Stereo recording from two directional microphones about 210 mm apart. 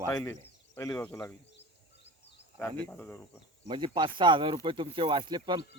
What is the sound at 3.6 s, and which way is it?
Speech, 20° right (ahead or behind).